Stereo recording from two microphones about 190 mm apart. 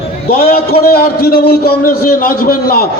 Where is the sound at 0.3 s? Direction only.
55° left (ahead or behind).